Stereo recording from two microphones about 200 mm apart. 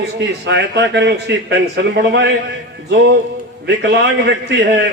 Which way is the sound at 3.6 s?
60° right (ahead or behind).